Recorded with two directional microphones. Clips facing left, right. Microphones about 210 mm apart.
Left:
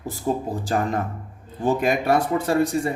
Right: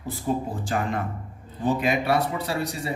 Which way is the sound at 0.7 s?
40° left (ahead or behind).